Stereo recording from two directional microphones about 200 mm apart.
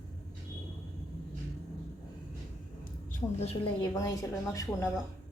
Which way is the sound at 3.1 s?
35° left (ahead or behind).